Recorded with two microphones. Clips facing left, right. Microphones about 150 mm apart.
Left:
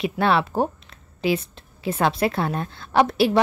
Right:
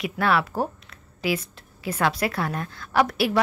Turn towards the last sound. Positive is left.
turn(degrees=25)  # may be behind; listen again after turning